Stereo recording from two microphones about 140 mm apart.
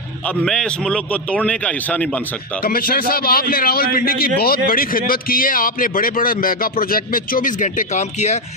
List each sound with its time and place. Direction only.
0.4 s speech: 5° left (ahead or behind)
2.6 s a man's voice: 90° left; by 8.4 s 55° left (ahead or behind)